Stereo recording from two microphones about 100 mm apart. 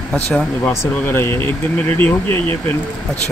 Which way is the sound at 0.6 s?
25° left (ahead or behind).